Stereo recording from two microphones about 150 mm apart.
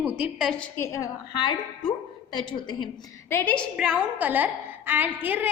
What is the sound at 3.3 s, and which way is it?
Speech, 10° left (ahead or behind).